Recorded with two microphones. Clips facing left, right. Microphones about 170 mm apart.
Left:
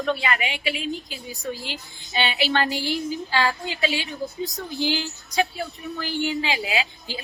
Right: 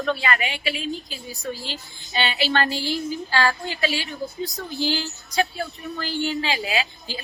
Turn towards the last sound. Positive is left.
turn(degrees=15)  # may be behind; listen again after turning